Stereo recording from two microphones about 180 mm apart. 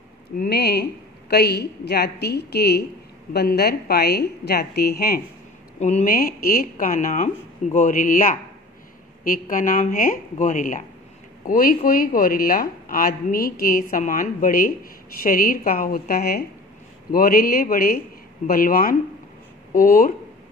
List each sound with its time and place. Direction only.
0.4 s a woman's voice: 65° left (ahead or behind)
5.8 s a woman's voice: 40° left (ahead or behind)